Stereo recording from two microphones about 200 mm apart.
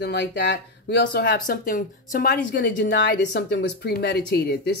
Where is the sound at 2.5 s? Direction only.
60° left (ahead or behind).